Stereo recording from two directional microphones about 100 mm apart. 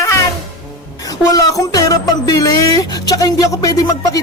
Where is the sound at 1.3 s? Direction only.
40° left (ahead or behind).